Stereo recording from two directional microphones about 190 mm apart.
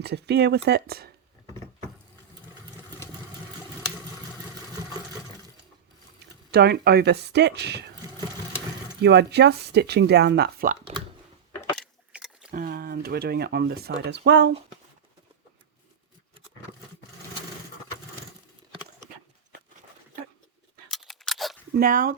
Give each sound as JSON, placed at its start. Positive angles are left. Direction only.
{"t": 0.0, "sound": "speech", "side_deg": -60}
{"t": 6.5, "sound": "speech", "side_deg": -60}
{"t": 9.0, "sound": "speech", "side_deg": -60}
{"t": 12.1, "sound": "a sound", "side_deg": -5}
{"t": 12.5, "sound": "speech", "side_deg": -50}
{"t": 20.9, "sound": "scissors", "side_deg": 0}
{"t": 21.8, "sound": "speech", "side_deg": -50}